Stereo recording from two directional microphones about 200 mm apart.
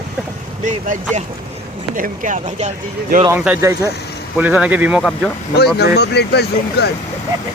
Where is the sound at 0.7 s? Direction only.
35° right (ahead or behind).